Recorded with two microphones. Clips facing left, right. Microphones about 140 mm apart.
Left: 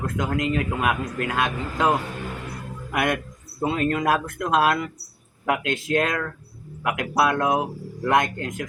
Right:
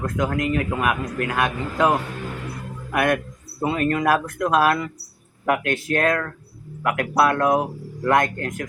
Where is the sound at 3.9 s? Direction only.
25° left (ahead or behind).